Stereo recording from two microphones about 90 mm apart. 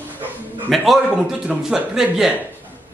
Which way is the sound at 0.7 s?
Centre (ahead or behind).